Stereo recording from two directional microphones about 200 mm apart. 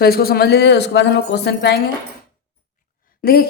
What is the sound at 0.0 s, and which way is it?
Speech, 50° left (ahead or behind).